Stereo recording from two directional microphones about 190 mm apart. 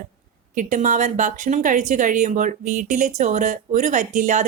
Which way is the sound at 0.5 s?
40° right (ahead or behind).